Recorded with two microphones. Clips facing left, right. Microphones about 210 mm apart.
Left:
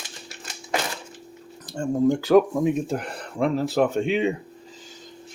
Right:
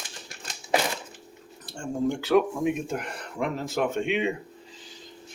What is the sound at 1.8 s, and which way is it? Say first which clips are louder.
Speech: left 6 dB; 40° left (ahead or behind).